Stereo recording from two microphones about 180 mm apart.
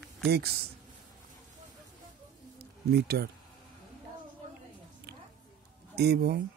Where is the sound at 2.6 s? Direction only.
65° right (ahead or behind).